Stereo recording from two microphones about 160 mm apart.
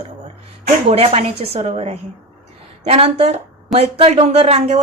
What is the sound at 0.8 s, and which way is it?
A woman's voice, 40° right (ahead or behind).